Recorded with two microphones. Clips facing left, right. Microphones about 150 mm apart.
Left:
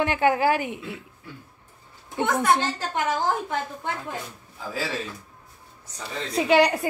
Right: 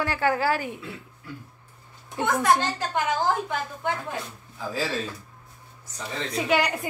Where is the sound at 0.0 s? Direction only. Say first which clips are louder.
Left 3 dB; 20° left (ahead or behind).